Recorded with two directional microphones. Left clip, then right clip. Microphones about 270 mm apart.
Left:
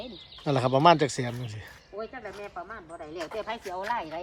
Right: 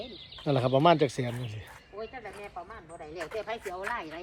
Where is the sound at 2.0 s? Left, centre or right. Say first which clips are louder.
Left 3 dB; left.